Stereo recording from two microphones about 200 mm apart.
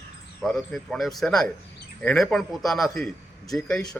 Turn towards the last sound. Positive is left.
turn(degrees=5)  # may be behind; listen again after turning